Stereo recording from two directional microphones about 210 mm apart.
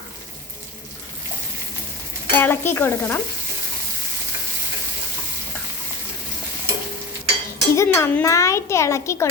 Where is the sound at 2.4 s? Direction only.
10° left (ahead or behind).